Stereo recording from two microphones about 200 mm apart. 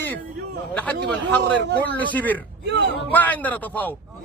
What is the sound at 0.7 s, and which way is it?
A man's voice, 5° left (ahead or behind).